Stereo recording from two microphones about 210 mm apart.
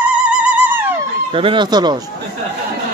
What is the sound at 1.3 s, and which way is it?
Speech, 25° right (ahead or behind).